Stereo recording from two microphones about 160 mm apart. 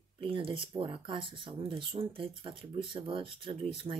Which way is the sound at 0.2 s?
35° right (ahead or behind).